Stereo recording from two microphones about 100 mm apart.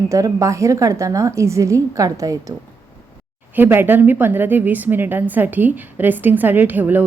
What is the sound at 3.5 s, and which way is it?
Speech, 20° right (ahead or behind).